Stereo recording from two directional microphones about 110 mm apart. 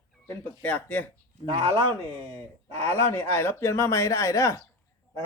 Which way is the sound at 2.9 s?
20° left (ahead or behind).